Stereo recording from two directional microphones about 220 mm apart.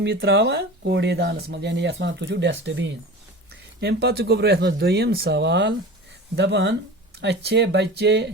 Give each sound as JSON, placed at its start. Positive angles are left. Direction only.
{"t": 0.0, "sound": "speech", "side_deg": -45}